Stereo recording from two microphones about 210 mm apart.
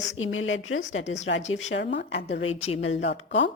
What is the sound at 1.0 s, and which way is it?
Speech, 35° left (ahead or behind).